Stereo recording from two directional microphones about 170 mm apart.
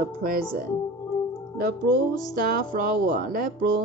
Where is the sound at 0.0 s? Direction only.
60° right (ahead or behind).